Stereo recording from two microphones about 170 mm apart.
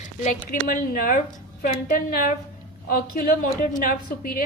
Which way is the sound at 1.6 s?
60° left (ahead or behind).